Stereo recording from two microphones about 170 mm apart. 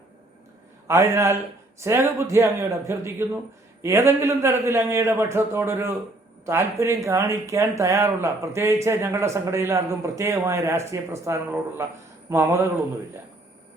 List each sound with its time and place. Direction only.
0.9 s speech: 15° right (ahead or behind)